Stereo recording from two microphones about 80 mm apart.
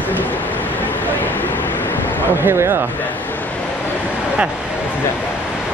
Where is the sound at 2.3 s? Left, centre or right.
Right.